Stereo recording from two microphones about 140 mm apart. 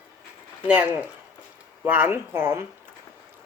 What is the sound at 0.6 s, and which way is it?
Speech, 10° right (ahead or behind).